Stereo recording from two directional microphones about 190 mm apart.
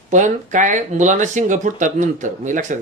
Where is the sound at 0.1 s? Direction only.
40° right (ahead or behind).